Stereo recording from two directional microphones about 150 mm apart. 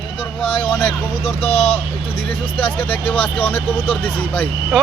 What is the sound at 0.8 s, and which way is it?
Speech, 10° left (ahead or behind).